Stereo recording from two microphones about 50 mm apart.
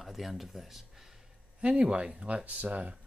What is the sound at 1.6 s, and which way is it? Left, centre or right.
Speech, right.